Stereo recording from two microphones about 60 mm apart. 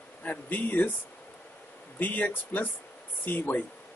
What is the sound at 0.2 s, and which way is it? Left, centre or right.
Speech, left.